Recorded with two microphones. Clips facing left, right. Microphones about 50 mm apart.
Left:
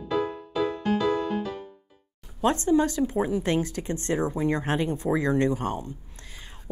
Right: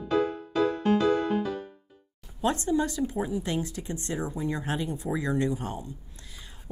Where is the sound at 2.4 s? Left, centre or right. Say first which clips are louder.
Left 4 dB; left.